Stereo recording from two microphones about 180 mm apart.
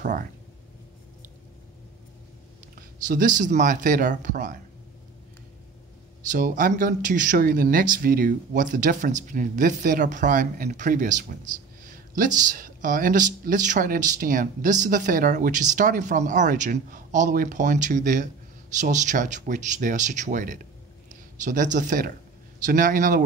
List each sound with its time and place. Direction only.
0.0 s speech: 45° right (ahead or behind)
3.1 s speech: 45° right (ahead or behind)
6.3 s speech: 45° right (ahead or behind)
21.1 s a sound: 45° right (ahead or behind)
21.7 s speech: 45° right (ahead or behind)